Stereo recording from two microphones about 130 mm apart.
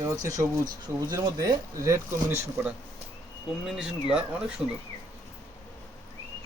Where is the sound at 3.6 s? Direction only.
5° right (ahead or behind).